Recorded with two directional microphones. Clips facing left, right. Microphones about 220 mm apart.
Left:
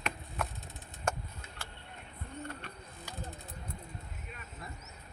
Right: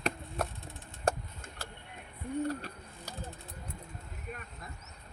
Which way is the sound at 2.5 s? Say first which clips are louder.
Right 7 dB; 40° right (ahead or behind).